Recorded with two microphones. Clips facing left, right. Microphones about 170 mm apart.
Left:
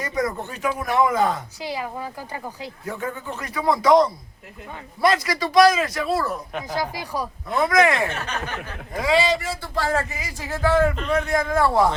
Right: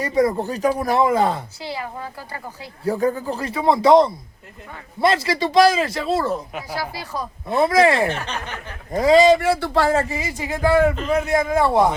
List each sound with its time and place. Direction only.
0.0 s speech: 30° right (ahead or behind)
1.6 s speech: 15° left (ahead or behind)
2.8 s a man's voice: 35° right (ahead or behind)
6.5 s a man's voice: 5° right (ahead or behind)
6.7 s speech: 15° left (ahead or behind)
7.4 s speech: 30° right (ahead or behind); by 9.9 s 70° right (ahead or behind)
9.9 s a man's voice: 25° right (ahead or behind); by 10.9 s 10° right (ahead or behind)
10.9 s a man's voice: centre (ahead or behind)
11.5 s a man's voice: 20° right (ahead or behind)